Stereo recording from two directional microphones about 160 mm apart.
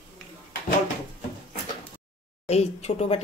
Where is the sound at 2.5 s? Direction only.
40° left (ahead or behind).